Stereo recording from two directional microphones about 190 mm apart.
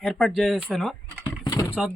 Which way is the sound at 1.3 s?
15° left (ahead or behind).